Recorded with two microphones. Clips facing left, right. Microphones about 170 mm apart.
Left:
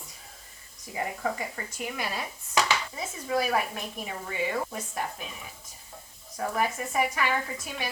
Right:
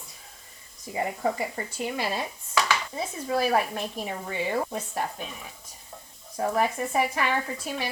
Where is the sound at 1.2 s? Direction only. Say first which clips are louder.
Right 4 dB; 30° right (ahead or behind).